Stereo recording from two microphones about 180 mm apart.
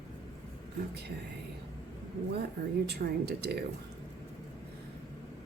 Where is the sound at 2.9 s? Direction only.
65° right (ahead or behind).